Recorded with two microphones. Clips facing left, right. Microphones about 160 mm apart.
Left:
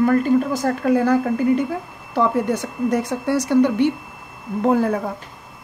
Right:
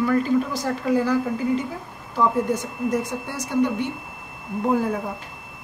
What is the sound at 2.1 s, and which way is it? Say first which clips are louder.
Speech: left 2 dB; 70° left (ahead or behind).